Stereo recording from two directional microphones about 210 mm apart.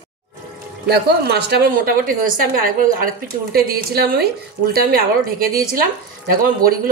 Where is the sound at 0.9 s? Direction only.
50° right (ahead or behind).